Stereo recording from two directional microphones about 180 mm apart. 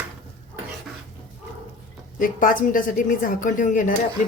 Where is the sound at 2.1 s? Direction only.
50° left (ahead or behind).